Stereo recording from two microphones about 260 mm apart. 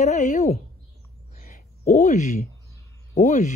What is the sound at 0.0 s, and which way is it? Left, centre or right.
Speech, left.